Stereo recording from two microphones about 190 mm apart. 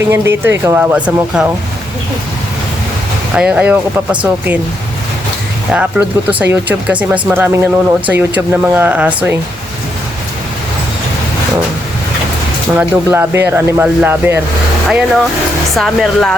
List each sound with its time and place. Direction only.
0.1 s speech: 10° right (ahead or behind)
3.3 s speech: 5° right (ahead or behind)
5.7 s speech: 5° right (ahead or behind)
12.7 s speech: 10° right (ahead or behind)